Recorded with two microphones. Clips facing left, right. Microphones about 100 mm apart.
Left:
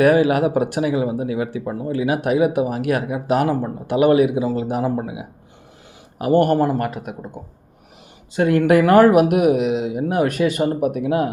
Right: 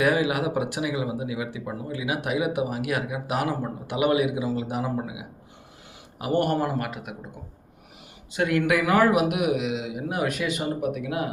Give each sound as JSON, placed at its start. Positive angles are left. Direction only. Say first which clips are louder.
{"t": 0.0, "sound": "a man's voice", "louder": "left 8 dB", "side_deg": 45}
{"t": 6.6, "sound": "a man's voice", "louder": "left 8 dB", "side_deg": 35}
{"t": 8.3, "sound": "speech", "louder": "left 8 dB", "side_deg": 35}